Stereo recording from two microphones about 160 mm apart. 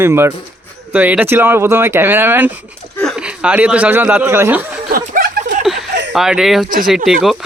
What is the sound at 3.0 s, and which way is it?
Speech, centre (ahead or behind).